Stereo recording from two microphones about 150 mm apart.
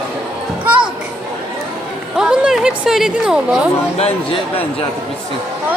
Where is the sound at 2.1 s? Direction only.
5° right (ahead or behind).